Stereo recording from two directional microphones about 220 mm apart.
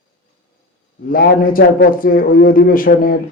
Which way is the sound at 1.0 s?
40° left (ahead or behind).